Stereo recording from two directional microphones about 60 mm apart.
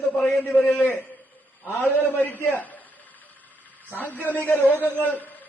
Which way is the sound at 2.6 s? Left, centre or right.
Left.